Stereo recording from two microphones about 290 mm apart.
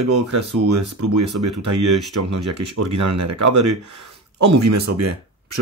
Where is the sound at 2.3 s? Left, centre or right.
Right.